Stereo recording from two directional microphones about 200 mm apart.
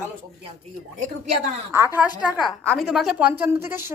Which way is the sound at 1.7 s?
10° right (ahead or behind).